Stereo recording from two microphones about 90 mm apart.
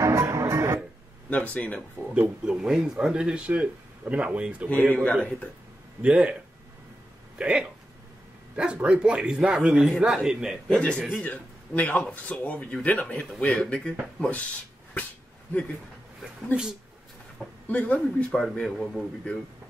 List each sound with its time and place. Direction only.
0.0 s music: 35° right (ahead or behind)
1.3 s speech: 15° left (ahead or behind)
2.1 s speech: 10° right (ahead or behind)
4.9 s speech: 15° left (ahead or behind)
6.0 s speech: 15° right (ahead or behind)
7.3 s speech: 10° right (ahead or behind)
8.8 s speech: 10° right (ahead or behind)
10.8 s speech: 10° left (ahead or behind)
17.6 s speech: 15° left (ahead or behind)
18.0 s speech: 5° left (ahead or behind)